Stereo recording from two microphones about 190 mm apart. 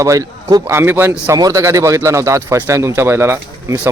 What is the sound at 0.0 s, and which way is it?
A man's voice, 15° right (ahead or behind).